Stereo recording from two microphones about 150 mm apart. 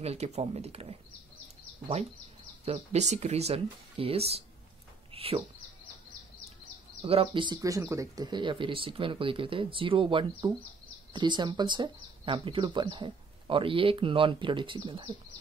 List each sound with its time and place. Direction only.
0.0 s speech: 45° right (ahead or behind)
2.6 s speech: 45° right (ahead or behind)
7.0 s speech: 35° right (ahead or behind)